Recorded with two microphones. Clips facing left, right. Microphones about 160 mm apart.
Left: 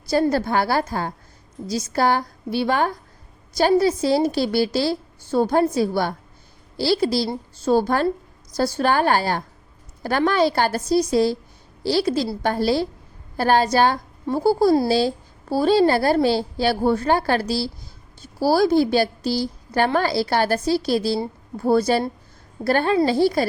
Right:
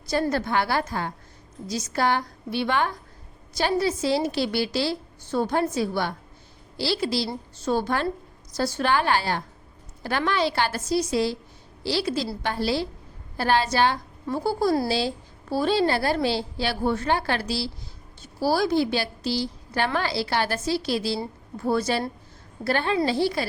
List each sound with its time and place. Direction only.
0.1 s a woman's voice: 35° left (ahead or behind)